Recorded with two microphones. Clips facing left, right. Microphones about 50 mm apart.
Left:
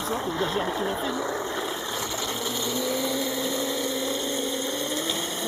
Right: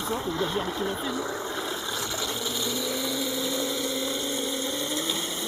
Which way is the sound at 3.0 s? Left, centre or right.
Centre.